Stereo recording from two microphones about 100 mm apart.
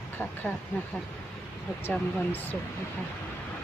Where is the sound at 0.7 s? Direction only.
20° left (ahead or behind).